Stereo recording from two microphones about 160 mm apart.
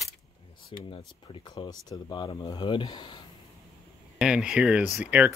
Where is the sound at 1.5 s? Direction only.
25° left (ahead or behind).